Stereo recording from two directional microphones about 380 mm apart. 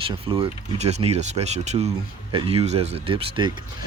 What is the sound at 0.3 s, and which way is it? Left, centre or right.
Speech, centre.